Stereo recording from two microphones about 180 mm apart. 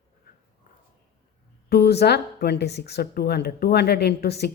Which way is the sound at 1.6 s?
60° left (ahead or behind).